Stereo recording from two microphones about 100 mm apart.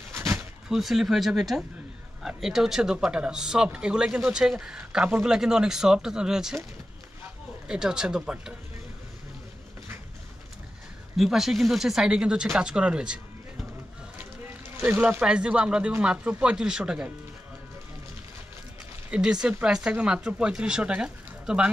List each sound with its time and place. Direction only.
0.1 s a sound: 25° right (ahead or behind)
0.7 s speech: 5° right (ahead or behind)
7.6 s speech: 5° right (ahead or behind)
11.1 s speech: 5° right (ahead or behind)
14.8 s speech: 15° right (ahead or behind)
19.0 s speech: 10° right (ahead or behind)